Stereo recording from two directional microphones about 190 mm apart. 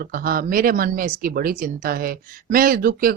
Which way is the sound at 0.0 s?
50° right (ahead or behind).